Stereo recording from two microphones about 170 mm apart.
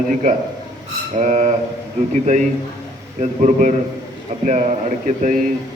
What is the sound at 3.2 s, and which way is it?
A man's voice, 45° right (ahead or behind).